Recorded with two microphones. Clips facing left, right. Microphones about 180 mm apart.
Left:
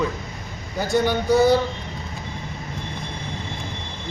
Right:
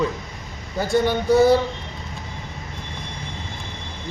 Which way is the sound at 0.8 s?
Centre (ahead or behind).